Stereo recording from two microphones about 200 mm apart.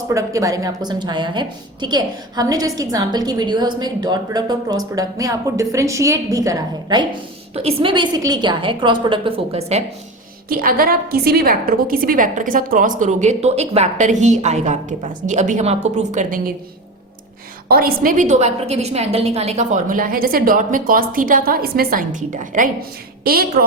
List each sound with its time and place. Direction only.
0.1 s a woman's voice: 15° right (ahead or behind)
7.5 s a woman's voice: 30° right (ahead or behind)
10.5 s a woman's voice: 45° right (ahead or behind)
17.7 s a woman's voice: 50° right (ahead or behind)